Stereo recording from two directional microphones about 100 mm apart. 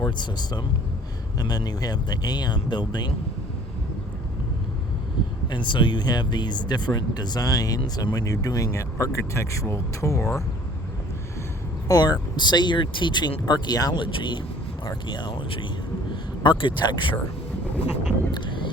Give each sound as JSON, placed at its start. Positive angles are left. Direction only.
{"t": 0.0, "sound": "speech", "side_deg": 45}
{"t": 5.5, "sound": "speech", "side_deg": 50}
{"t": 11.9, "sound": "speech", "side_deg": 40}
{"t": 14.0, "sound": "speech", "side_deg": 55}
{"t": 18.3, "sound": "vehicle", "side_deg": 55}